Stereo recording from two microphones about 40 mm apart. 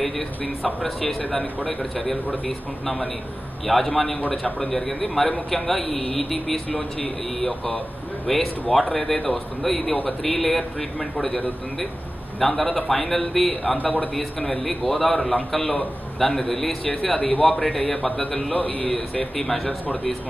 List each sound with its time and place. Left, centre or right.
0.8 s a man's voice: centre
3.6 s a man's voice: centre
16.8 s speech: left
17.5 s a man's voice: centre
18.5 s a man's voice: left
19.3 s a man's voice: centre